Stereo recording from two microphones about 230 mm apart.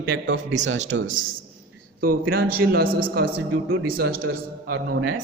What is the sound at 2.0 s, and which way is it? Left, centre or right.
A man's voice, right.